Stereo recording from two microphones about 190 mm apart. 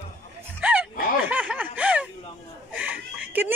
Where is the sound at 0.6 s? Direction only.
10° right (ahead or behind).